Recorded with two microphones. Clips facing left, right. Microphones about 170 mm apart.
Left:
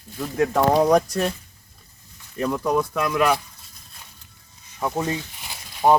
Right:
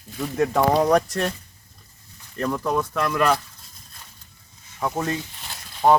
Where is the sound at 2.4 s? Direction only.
5° left (ahead or behind).